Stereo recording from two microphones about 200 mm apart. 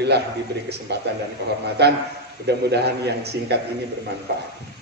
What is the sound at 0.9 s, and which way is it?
A man's voice, 55° right (ahead or behind).